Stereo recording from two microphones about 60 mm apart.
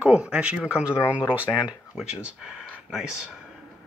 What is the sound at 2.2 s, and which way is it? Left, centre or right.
Speech, centre.